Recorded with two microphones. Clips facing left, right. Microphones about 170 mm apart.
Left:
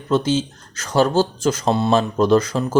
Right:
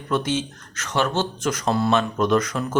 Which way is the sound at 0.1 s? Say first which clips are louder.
Left 5 dB; 30° left (ahead or behind).